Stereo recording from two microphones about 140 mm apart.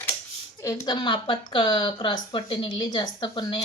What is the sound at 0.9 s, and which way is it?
Speech, 35° left (ahead or behind).